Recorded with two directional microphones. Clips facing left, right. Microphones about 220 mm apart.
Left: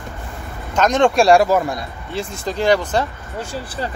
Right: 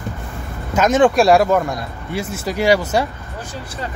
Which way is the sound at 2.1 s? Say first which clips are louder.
Right 1 dB; 10° right (ahead or behind).